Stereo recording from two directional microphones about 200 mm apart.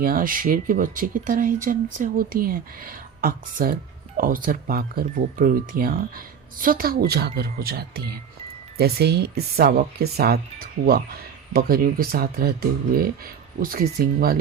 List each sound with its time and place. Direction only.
0.0 s speech: 45° right (ahead or behind)